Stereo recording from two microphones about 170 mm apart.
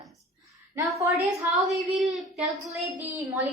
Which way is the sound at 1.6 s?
Centre (ahead or behind).